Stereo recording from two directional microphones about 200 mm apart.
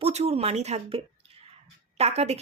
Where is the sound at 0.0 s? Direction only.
30° right (ahead or behind).